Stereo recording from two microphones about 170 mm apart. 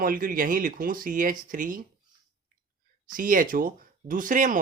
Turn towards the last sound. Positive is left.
turn(degrees=-50)  # may be behind; listen again after turning